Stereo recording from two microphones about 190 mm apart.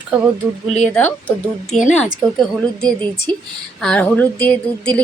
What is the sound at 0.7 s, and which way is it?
Speech, 5° left (ahead or behind).